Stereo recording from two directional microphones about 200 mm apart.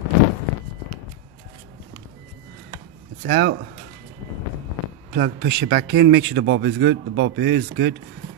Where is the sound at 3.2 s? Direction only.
55° right (ahead or behind).